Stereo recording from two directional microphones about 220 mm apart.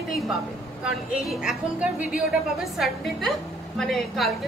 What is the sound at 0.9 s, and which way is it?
A woman's voice, centre (ahead or behind).